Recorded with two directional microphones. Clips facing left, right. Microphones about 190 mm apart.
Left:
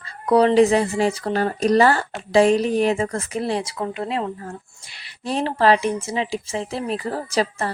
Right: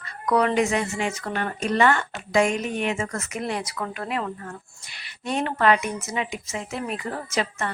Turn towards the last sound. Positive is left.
turn(degrees=35)  # may be behind; listen again after turning